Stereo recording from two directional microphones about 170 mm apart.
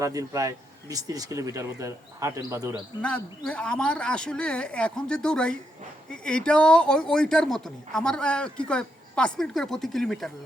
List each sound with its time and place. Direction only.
0.0 s speech: 20° right (ahead or behind)
3.0 s speech: 5° left (ahead or behind)